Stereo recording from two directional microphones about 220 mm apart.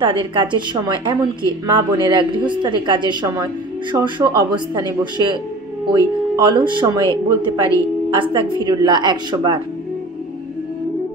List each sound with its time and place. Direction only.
0.0 s speech: 20° right (ahead or behind)